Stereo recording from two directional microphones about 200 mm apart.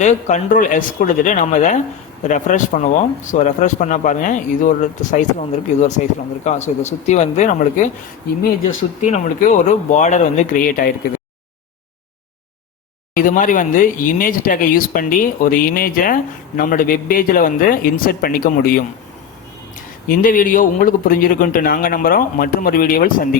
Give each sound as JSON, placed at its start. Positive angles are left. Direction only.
{"t": 0.0, "sound": "speech", "side_deg": 35}
{"t": 9.0, "sound": "speech", "side_deg": 35}
{"t": 13.2, "sound": "a man's voice", "side_deg": 40}
{"t": 20.1, "sound": "a man's voice", "side_deg": 45}